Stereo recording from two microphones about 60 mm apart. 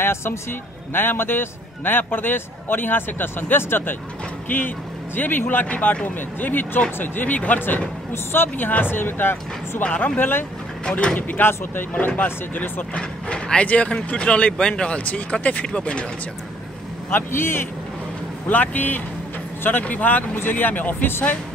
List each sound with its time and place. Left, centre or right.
0.0 s a man's voice: left
9.8 s speech: left
10.9 s speech: centre
11.1 s a man's voice: left
12.9 s speech: centre
17.1 s a man's voice: left
18.5 s a man's voice: left